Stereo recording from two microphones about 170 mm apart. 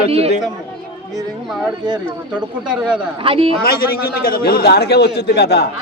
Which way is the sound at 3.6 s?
65° left (ahead or behind).